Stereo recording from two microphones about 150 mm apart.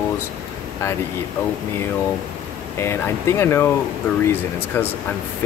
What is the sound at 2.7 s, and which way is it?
Speech, 20° left (ahead or behind).